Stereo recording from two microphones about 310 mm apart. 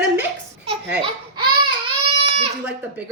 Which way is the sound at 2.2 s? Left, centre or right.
Centre.